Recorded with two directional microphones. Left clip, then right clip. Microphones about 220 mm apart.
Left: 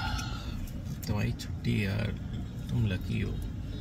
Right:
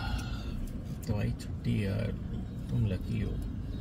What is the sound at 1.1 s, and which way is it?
Speech, centre (ahead or behind).